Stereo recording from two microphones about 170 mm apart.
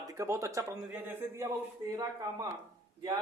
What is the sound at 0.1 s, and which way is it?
Speech, 20° right (ahead or behind).